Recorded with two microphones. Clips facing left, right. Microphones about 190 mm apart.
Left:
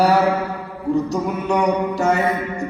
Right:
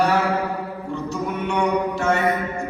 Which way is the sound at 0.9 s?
40° left (ahead or behind).